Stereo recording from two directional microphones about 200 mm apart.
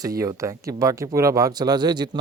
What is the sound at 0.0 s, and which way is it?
Speech, 15° right (ahead or behind).